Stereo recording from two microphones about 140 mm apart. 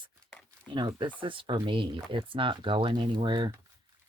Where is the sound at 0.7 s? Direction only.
35° right (ahead or behind).